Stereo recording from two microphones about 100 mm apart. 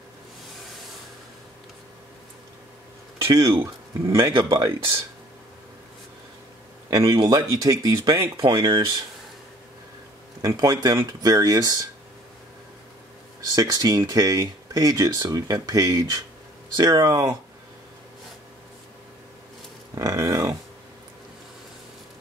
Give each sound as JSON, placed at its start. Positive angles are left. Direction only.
{"t": 3.6, "sound": "speech", "side_deg": -30}
{"t": 4.2, "sound": "speech", "side_deg": -50}
{"t": 4.7, "sound": "speech", "side_deg": -25}
{"t": 6.9, "sound": "speech", "side_deg": -40}
{"t": 10.4, "sound": "speech", "side_deg": -40}
{"t": 13.5, "sound": "speech", "side_deg": -40}
{"t": 20.0, "sound": "speech", "side_deg": -35}